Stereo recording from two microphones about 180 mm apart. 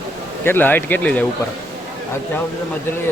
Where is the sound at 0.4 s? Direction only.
10° left (ahead or behind).